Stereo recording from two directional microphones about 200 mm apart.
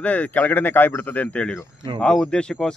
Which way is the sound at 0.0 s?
5° left (ahead or behind).